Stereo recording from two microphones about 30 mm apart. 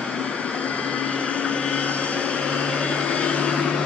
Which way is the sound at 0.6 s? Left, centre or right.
Left.